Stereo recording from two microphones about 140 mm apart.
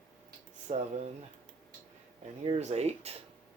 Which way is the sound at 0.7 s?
50° right (ahead or behind).